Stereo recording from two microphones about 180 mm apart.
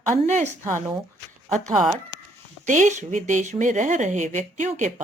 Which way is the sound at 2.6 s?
45° right (ahead or behind).